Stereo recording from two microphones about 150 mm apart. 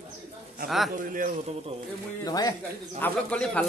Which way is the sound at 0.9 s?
60° right (ahead or behind).